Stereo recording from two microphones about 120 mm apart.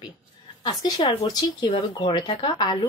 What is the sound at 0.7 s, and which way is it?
Speech, 35° left (ahead or behind).